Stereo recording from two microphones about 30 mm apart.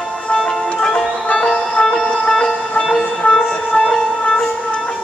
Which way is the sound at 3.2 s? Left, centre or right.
Left.